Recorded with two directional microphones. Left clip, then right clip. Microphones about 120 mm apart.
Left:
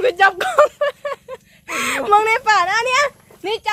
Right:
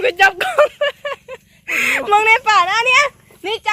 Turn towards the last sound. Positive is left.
turn(degrees=-25)  # may be behind; listen again after turning